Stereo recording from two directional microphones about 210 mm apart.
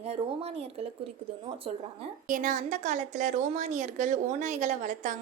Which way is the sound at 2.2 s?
40° right (ahead or behind).